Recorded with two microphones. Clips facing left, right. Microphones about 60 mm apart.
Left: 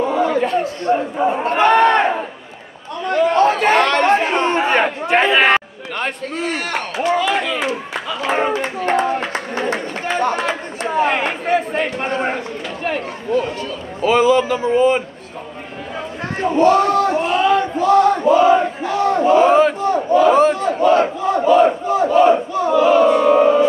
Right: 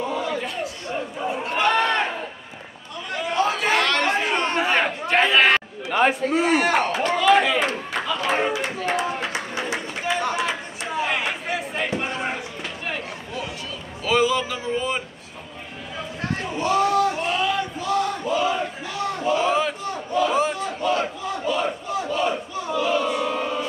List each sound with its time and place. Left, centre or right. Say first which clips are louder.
0.0 s a sound: left 9 dB; left
3.1 s chatter: left 9 dB; left
3.8 s chatter: left 6 dB; left
4.1 s chatter: left 7 dB; left
4.6 s chatter: left 5 dB; left
5.9 s a man's voice: right 4 dB; centre
8.4 s a sound: left 5 dB; left
14.0 s speech: left 7 dB; left
16.4 s a sound: left 9 dB; left